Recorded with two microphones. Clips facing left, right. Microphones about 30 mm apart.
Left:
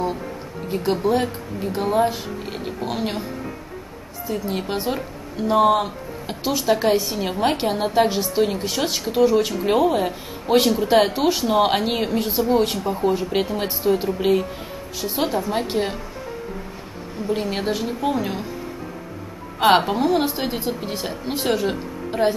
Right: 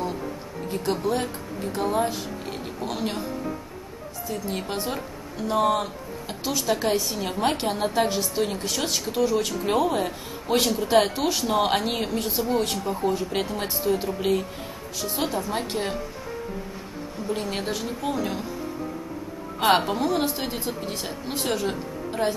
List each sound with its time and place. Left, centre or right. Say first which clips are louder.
0.0 s speech: left 4 dB; centre
4.3 s speech: left 5 dB; centre
17.3 s speech: left 5 dB; centre
19.6 s speech: left 5 dB; centre